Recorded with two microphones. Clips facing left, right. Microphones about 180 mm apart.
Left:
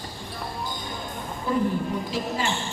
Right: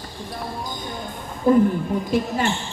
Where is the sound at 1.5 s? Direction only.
50° right (ahead or behind).